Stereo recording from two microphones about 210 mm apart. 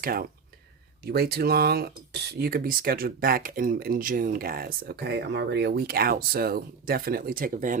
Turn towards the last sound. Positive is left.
turn(degrees=-40)  # may be behind; listen again after turning